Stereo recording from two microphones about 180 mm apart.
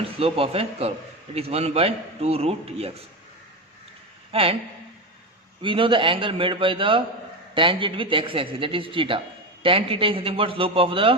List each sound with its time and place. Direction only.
0.2 s a man's voice: 30° right (ahead or behind)
4.3 s speech: 30° right (ahead or behind)
5.6 s a man's voice: 30° right (ahead or behind)